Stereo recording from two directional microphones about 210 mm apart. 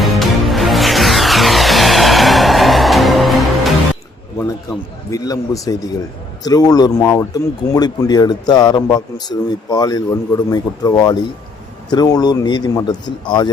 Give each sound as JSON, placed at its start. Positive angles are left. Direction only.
{"t": 0.0, "sound": "music", "side_deg": 0}
{"t": 4.4, "sound": "a sound", "side_deg": 15}
{"t": 6.4, "sound": "speech", "side_deg": 20}